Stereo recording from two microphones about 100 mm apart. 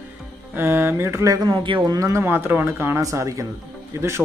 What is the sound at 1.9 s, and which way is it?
Speech, 30° right (ahead or behind).